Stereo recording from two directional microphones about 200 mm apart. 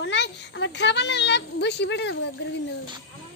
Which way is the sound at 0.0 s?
60° left (ahead or behind).